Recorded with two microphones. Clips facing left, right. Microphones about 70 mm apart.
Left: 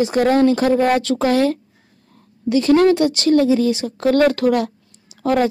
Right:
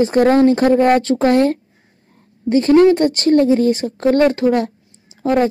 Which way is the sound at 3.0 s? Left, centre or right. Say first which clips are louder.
Right 2 dB; right.